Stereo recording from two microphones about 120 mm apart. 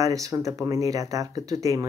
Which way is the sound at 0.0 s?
30° right (ahead or behind).